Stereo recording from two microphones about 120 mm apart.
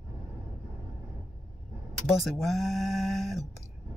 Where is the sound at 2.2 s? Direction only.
Centre (ahead or behind).